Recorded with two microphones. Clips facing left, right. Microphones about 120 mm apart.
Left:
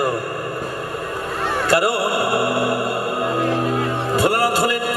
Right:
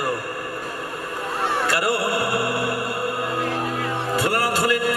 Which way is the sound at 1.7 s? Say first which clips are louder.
Left 4 dB; 20° left (ahead or behind).